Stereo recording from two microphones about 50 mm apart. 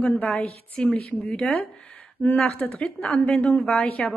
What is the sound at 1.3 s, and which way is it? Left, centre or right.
Speech, centre.